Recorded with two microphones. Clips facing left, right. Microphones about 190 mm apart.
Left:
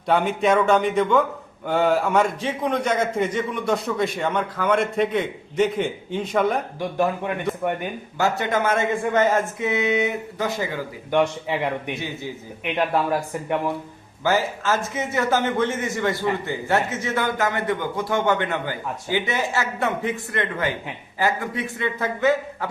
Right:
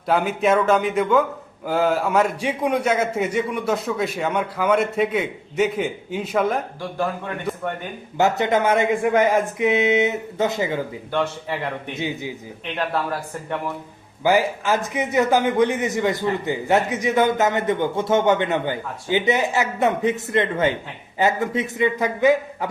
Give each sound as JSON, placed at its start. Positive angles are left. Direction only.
{"t": 0.1, "sound": "a man's voice", "side_deg": 0}
{"t": 6.7, "sound": "speech", "side_deg": 15}
{"t": 8.2, "sound": "a man's voice", "side_deg": -20}
{"t": 11.1, "sound": "speech", "side_deg": 15}
{"t": 11.9, "sound": "a man's voice", "side_deg": -15}
{"t": 12.6, "sound": "speech", "side_deg": 15}
{"t": 14.3, "sound": "a man's voice", "side_deg": -15}